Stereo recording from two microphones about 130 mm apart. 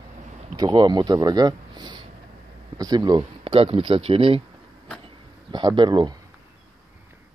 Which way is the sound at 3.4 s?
45° right (ahead or behind).